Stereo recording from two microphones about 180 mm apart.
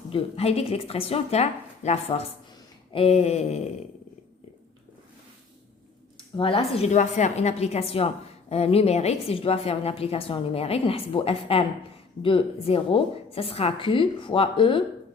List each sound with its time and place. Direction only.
0.1 s a woman's voice: 30° left (ahead or behind)
6.1 s a woman's voice: 30° left (ahead or behind)